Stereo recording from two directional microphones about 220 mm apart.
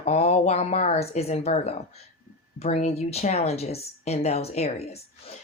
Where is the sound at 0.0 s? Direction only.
30° left (ahead or behind).